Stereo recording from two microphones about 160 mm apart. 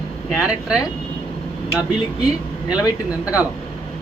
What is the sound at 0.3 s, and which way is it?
Speech, 5° right (ahead or behind).